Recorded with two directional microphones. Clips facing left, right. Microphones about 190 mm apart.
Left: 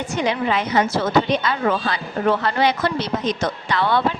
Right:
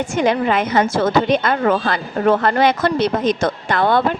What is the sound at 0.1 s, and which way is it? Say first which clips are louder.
A woman's voice: right 4 dB; 50° right (ahead or behind).